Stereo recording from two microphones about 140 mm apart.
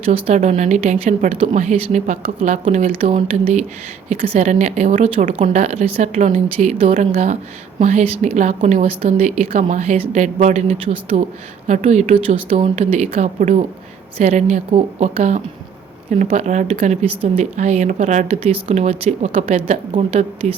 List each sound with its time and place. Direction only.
0.0 s speech: 45° right (ahead or behind)
0.3 s speech: 60° right (ahead or behind)
7.8 s speech: 60° right (ahead or behind)